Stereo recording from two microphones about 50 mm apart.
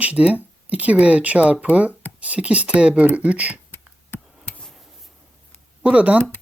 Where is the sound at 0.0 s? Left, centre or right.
Right.